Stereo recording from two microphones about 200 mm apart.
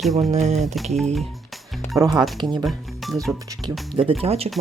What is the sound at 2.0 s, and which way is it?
Speech, 20° right (ahead or behind).